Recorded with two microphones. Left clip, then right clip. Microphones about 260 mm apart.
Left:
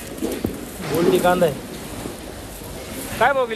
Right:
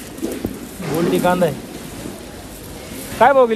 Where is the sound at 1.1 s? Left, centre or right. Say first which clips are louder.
Even; centre.